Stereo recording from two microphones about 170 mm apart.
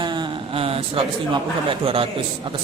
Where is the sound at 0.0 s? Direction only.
25° right (ahead or behind).